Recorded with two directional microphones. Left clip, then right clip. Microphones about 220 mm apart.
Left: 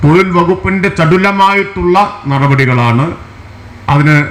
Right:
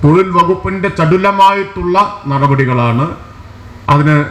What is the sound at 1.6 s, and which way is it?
A man's voice, 40° left (ahead or behind).